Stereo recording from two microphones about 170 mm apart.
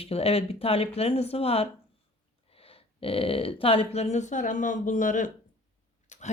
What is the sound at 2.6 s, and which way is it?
Speech, 35° left (ahead or behind).